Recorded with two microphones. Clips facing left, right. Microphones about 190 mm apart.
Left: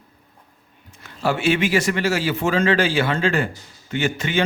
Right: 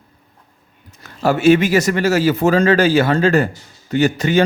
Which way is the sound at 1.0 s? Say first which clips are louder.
Right 8 dB; 40° right (ahead or behind).